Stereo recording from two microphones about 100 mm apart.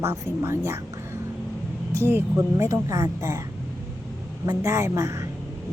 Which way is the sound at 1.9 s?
25° right (ahead or behind).